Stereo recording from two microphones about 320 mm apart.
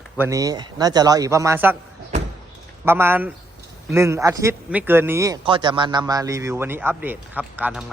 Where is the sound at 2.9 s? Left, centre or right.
Centre.